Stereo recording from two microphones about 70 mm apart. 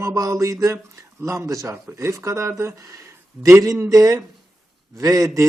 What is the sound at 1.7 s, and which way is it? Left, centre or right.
Speech, right.